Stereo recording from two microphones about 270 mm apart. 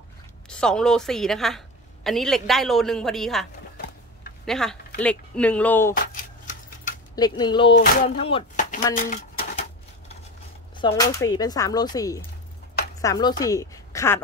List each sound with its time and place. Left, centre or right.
0.5 s a woman's voice: centre
4.5 s a woman's voice: centre
7.2 s speech: centre
7.7 s a sound: left
8.2 s speech: left
8.9 s a sound: left
10.8 s a woman's voice: centre